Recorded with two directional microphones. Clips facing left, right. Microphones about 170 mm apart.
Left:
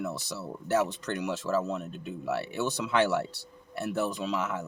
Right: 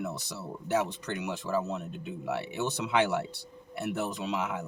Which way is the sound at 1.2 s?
20° right (ahead or behind).